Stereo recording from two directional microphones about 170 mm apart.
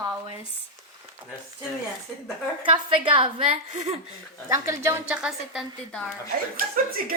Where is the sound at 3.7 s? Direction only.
45° right (ahead or behind).